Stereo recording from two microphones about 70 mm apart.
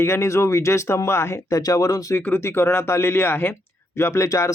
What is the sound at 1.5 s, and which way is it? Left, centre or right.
Speech, left.